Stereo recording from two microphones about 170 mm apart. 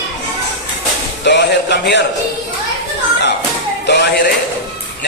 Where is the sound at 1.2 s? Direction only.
90° left.